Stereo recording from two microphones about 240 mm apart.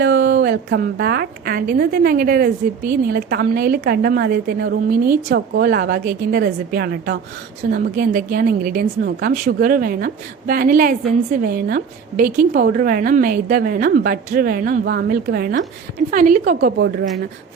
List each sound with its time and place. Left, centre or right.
0.0 s a woman's voice: right